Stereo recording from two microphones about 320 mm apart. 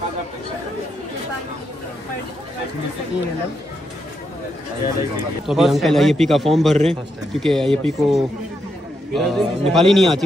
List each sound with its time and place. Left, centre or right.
5.5 s a man's voice: centre